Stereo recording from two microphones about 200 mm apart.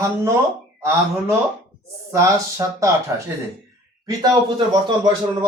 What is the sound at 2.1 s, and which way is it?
Speech, 15° right (ahead or behind).